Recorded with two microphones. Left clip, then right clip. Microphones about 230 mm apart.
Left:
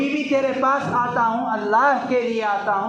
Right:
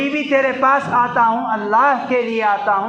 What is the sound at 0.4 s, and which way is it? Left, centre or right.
A man's voice, right.